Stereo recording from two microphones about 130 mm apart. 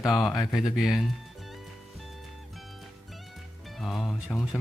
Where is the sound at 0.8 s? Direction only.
Centre (ahead or behind).